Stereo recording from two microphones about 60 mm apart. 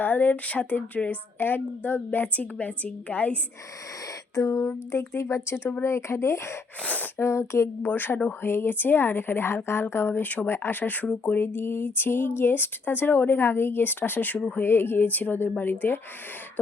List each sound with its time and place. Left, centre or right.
0.0 s a woman's voice: left
4.4 s a sound: left
4.9 s speech: left
6.8 s a woman's voice: left
7.2 s speech: left
7.8 s speech: left